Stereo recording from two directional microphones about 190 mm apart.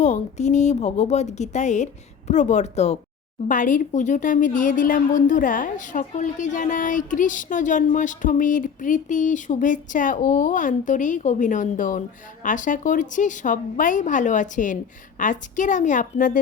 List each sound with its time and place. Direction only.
0.0 s a woman's voice: 40° left (ahead or behind)